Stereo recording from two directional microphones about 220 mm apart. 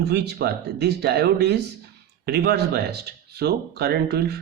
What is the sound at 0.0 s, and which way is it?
Speech, 50° right (ahead or behind).